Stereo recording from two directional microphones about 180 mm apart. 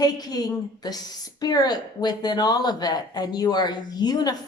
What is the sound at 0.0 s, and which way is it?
Speech, 20° left (ahead or behind).